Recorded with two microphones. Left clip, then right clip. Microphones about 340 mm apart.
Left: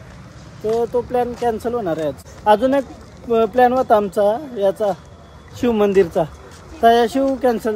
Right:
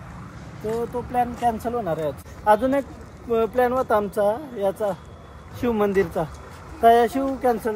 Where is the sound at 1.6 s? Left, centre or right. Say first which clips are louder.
Left 4 dB; left.